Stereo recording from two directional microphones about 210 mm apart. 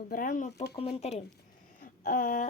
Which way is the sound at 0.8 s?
30° left (ahead or behind).